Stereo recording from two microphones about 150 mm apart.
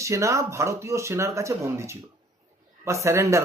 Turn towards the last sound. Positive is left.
turn(degrees=-20)  # may be behind; listen again after turning